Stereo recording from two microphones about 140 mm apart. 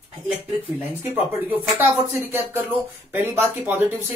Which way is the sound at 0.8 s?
15° right (ahead or behind).